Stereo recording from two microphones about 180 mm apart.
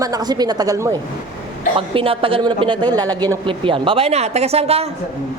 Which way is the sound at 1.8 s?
30° right (ahead or behind).